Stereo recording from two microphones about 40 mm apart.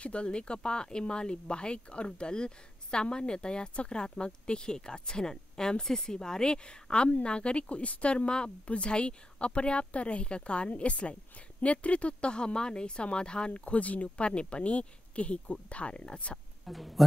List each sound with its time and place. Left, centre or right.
0.0 s speech: left
16.6 s speech: centre